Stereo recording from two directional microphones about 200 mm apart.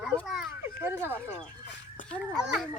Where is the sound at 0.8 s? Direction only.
10° right (ahead or behind).